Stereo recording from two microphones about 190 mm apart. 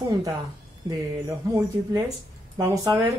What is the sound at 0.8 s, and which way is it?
Speech, 20° right (ahead or behind).